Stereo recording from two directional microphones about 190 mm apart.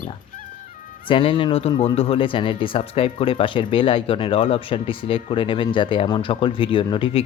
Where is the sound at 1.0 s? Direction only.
25° left (ahead or behind).